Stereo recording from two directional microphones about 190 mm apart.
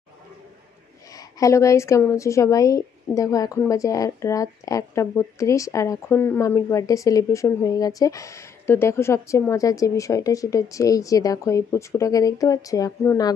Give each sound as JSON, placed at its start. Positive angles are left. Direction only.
{"t": 1.1, "sound": "a woman's voice", "side_deg": 15}